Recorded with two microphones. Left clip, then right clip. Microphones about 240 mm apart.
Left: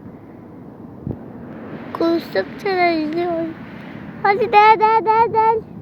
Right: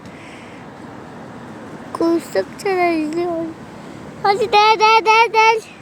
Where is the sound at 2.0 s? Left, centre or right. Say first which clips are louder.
Right 1 dB; centre.